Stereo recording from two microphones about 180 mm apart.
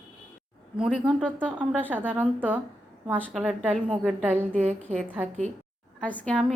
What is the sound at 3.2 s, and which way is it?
Speech, 5° left (ahead or behind).